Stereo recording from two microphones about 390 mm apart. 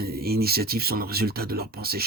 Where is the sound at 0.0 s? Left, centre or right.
Right.